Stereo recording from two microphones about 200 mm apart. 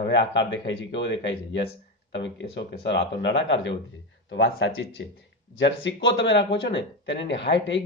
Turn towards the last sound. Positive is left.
turn(degrees=65)  # may be behind; listen again after turning